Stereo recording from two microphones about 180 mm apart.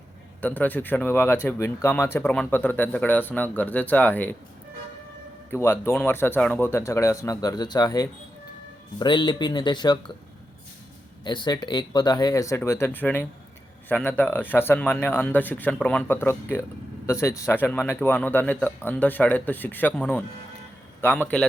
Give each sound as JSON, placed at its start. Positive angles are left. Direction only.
{"t": 0.4, "sound": "speech", "side_deg": 10}
{"t": 5.5, "sound": "speech", "side_deg": 10}
{"t": 11.2, "sound": "speech", "side_deg": 25}